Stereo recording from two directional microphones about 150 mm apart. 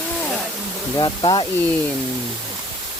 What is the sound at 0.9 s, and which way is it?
Speech, 30° left (ahead or behind).